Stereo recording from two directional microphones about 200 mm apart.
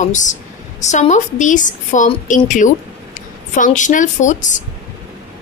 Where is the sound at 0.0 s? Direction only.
40° left (ahead or behind).